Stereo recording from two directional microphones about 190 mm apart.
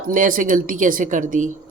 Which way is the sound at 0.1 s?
45° right (ahead or behind).